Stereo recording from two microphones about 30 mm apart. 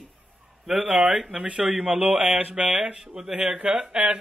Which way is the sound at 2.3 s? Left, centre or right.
Right.